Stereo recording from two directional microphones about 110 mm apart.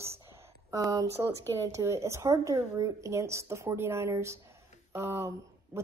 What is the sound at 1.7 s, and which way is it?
A woman's voice, 25° right (ahead or behind).